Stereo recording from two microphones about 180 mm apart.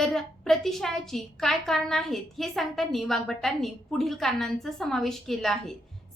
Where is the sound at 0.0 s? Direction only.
Centre (ahead or behind).